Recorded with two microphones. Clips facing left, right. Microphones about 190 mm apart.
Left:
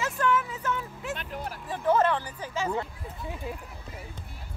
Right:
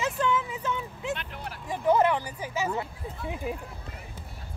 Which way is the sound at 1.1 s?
45° left (ahead or behind).